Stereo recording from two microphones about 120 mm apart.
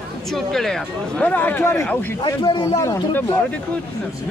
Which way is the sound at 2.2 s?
45° left (ahead or behind).